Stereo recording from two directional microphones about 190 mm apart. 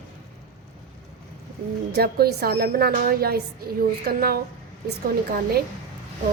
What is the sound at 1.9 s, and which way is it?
A woman's voice, 55° right (ahead or behind).